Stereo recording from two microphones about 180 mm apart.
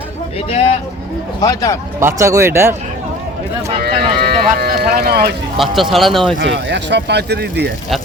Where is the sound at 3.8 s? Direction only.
60° right (ahead or behind).